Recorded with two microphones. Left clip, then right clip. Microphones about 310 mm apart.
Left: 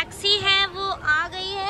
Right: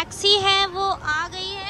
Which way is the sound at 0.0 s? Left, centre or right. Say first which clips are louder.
Right 3 dB; centre.